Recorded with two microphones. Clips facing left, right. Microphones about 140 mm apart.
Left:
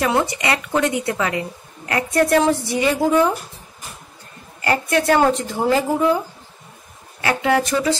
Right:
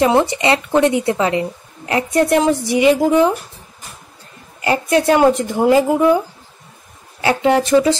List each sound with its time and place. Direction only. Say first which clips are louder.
0.0 s a woman's voice: right 5 dB; 25° right (ahead or behind)
4.6 s a woman's voice: right 3 dB; 20° right (ahead or behind)
7.2 s a woman's voice: right 4 dB; 25° right (ahead or behind)